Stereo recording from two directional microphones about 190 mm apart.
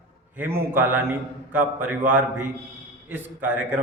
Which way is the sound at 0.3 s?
10° right (ahead or behind).